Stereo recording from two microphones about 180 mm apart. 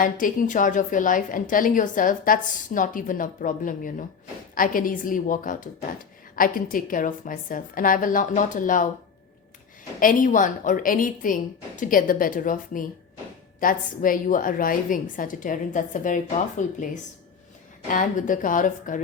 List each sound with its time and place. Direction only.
0.0 s a woman's voice: 50° left (ahead or behind)
10.0 s a woman's voice: 50° left (ahead or behind)